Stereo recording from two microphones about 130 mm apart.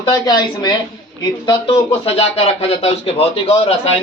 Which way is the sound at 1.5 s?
40° left (ahead or behind).